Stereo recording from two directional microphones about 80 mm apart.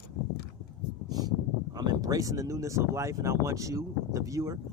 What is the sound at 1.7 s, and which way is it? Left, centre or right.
Speech, right.